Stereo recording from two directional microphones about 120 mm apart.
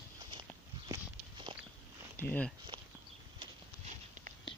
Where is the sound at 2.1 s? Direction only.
15° left (ahead or behind).